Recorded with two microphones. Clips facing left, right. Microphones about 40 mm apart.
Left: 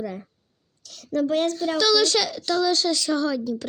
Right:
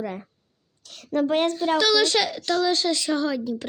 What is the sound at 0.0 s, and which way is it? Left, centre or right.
A child's voice, right.